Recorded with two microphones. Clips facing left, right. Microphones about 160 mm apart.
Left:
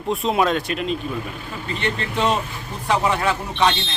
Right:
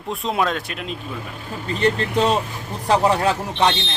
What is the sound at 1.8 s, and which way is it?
A man's voice, 35° right (ahead or behind).